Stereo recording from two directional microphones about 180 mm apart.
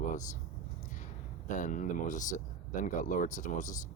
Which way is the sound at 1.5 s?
45° left (ahead or behind).